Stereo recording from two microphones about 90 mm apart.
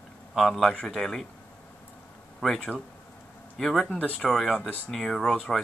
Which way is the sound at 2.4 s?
Centre (ahead or behind).